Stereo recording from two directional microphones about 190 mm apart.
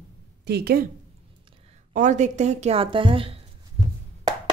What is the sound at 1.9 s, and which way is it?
A woman's voice, 40° right (ahead or behind).